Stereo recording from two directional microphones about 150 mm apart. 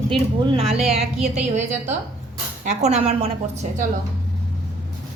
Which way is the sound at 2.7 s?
50° right (ahead or behind).